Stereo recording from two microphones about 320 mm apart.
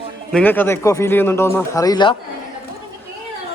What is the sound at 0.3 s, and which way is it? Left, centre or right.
Speech, centre.